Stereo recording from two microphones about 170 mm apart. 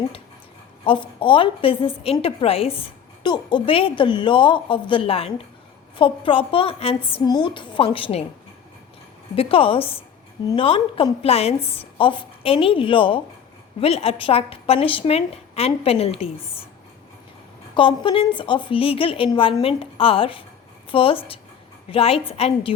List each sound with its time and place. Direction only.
0.9 s a woman's voice: 30° left (ahead or behind)
9.3 s a woman's voice: 35° left (ahead or behind)
17.7 s a woman's voice: 30° left (ahead or behind)